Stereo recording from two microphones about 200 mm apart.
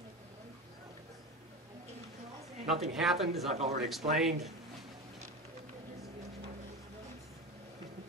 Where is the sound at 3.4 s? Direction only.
35° right (ahead or behind).